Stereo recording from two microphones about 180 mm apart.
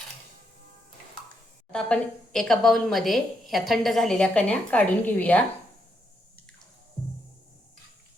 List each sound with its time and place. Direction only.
1.7 s a woman's voice: 5° left (ahead or behind)